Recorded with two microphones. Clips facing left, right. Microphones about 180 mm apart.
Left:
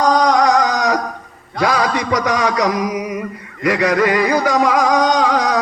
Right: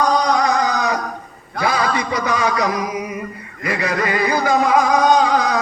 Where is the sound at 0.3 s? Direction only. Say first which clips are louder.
Left 3 dB; 75° left (ahead or behind).